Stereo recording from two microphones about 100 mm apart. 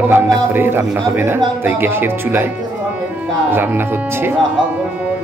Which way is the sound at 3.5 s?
20° right (ahead or behind).